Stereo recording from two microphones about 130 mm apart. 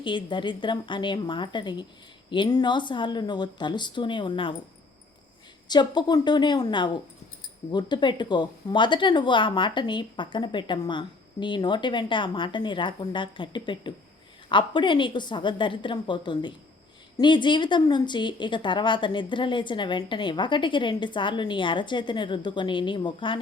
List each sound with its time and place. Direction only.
0.0 s a woman's voice: 40° left (ahead or behind)
5.6 s a woman's voice: 35° left (ahead or behind)